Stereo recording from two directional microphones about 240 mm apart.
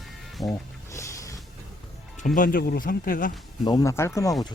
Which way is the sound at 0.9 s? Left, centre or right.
Centre.